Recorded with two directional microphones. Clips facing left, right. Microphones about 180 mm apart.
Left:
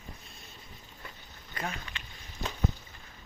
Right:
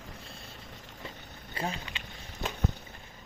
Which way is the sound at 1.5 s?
30° right (ahead or behind).